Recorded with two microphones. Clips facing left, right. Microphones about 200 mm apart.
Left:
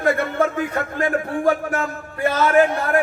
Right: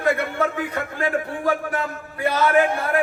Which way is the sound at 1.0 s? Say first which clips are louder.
Left 4 dB; 45° left (ahead or behind).